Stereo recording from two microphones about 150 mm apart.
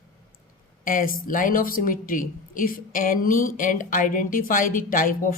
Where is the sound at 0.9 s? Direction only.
65° left (ahead or behind).